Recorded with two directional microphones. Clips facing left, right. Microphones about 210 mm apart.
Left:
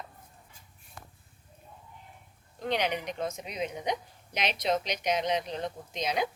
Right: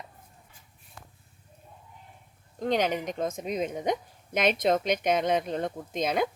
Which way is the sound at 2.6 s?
45° right (ahead or behind).